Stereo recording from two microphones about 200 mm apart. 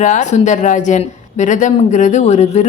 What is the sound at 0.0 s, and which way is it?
Speech, 40° left (ahead or behind).